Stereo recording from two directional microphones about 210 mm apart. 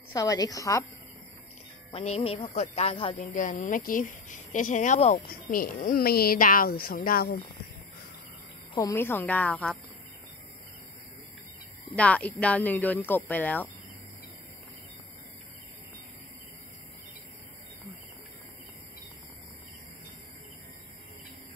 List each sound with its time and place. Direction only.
0.1 s speech: 15° left (ahead or behind)
1.9 s speech: 30° left (ahead or behind)
3.3 s speech: 40° left (ahead or behind)
8.7 s speech: 15° left (ahead or behind)
11.9 s speech: 5° left (ahead or behind)